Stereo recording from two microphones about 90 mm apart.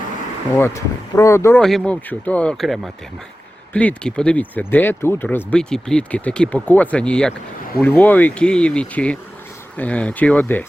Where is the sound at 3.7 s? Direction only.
15° left (ahead or behind).